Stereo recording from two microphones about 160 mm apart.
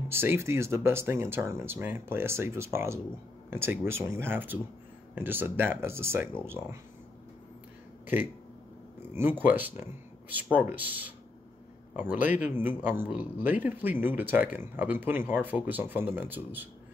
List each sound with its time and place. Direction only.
0.1 s speech: 15° right (ahead or behind)
9.1 s speech: 15° right (ahead or behind)